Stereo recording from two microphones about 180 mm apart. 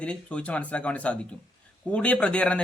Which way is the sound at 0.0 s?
5° left (ahead or behind).